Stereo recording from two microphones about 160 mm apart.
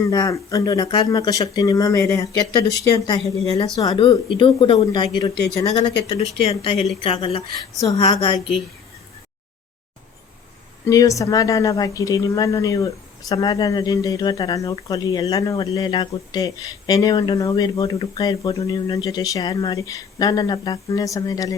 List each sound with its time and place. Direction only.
0.1 s speech: 20° left (ahead or behind)
4.0 s speech: 30° left (ahead or behind)
6.1 s speech: 40° left (ahead or behind)
10.8 s speech: 20° left (ahead or behind)